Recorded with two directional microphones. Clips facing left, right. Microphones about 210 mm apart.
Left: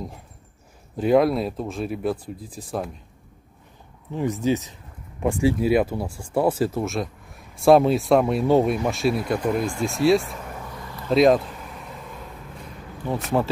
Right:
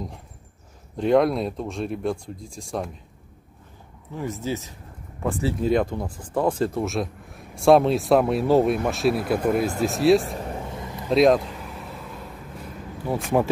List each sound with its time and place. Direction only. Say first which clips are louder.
0.9 s speech: left 1 dB; 5° left (ahead or behind)
4.1 s speech: left 6 dB; 15° left (ahead or behind); by 10.3 s centre (ahead or behind)
10.3 s vehicle: right 4 dB; 30° right (ahead or behind)
11.1 s vehicle: left 1 dB; centre (ahead or behind)